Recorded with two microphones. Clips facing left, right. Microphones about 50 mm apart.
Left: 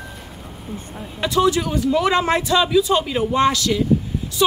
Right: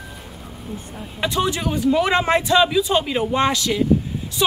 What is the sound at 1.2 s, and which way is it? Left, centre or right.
A man's voice, right.